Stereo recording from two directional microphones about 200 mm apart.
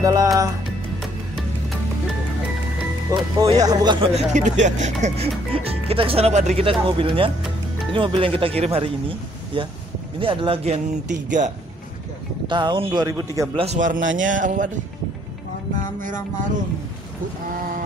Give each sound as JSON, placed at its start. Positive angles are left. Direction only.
{"t": 0.0, "sound": "speech", "side_deg": -15}
{"t": 3.1, "sound": "speech", "side_deg": -15}
{"t": 4.3, "sound": "speech", "side_deg": -35}
{"t": 10.1, "sound": "speech", "side_deg": -25}
{"t": 12.4, "sound": "speech", "side_deg": -25}
{"t": 13.6, "sound": "speech", "side_deg": -35}